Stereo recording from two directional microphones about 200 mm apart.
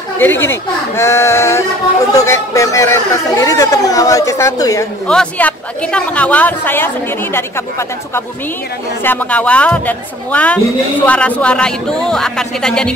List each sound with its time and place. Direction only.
0.2 s speech: 10° left (ahead or behind)
5.0 s speech: 5° left (ahead or behind)
9.0 s speech: 10° left (ahead or behind)